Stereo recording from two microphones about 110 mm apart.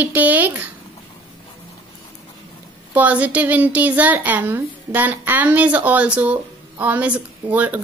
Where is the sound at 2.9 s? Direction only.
15° right (ahead or behind).